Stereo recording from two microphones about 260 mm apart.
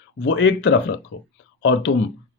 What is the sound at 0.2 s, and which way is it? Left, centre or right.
Speech, left.